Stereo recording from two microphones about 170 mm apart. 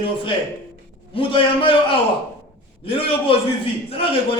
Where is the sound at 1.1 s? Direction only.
30° left (ahead or behind).